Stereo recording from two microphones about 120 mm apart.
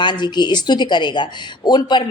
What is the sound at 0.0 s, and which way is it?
Speech, 40° left (ahead or behind).